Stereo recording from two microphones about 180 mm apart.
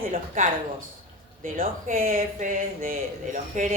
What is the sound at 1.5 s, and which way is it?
Speech, 50° right (ahead or behind).